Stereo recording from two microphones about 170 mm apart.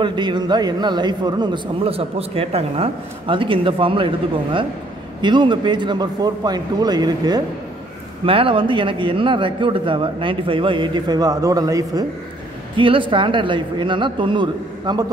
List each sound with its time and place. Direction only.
0.0 s a man's voice: 25° right (ahead or behind)